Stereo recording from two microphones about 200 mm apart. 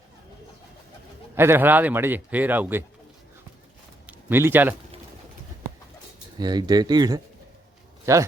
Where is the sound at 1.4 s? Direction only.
10° right (ahead or behind).